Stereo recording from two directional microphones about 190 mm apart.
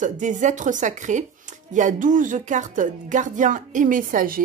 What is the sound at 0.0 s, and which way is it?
A woman's voice, 40° right (ahead or behind).